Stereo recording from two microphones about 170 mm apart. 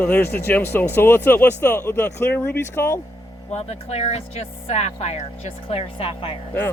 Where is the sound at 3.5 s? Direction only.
40° left (ahead or behind).